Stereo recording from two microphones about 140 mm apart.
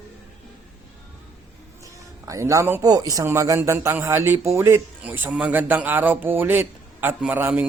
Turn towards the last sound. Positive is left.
turn(degrees=-15)  # may be behind; listen again after turning